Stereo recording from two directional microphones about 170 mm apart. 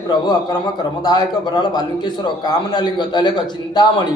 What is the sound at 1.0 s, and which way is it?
A man's voice, 25° left (ahead or behind).